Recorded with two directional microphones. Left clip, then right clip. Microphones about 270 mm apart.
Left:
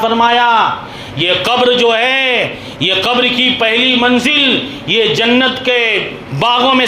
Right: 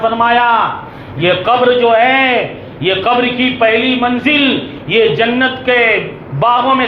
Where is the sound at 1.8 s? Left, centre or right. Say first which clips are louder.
Right 2 dB; left.